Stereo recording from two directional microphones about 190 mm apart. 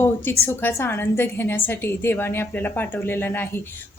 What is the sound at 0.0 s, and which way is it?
A woman's voice, 10° left (ahead or behind).